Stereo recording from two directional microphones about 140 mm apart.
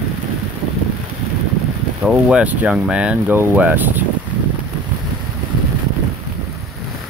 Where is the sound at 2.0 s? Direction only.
5° right (ahead or behind).